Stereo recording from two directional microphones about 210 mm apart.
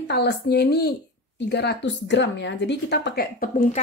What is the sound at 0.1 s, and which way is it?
A woman's voice, 55° left (ahead or behind).